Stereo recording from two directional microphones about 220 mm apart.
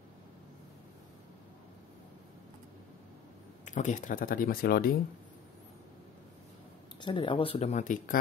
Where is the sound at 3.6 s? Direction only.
35° left (ahead or behind).